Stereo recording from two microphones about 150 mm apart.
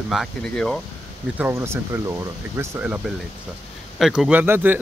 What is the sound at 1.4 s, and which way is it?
Speech, 15° right (ahead or behind).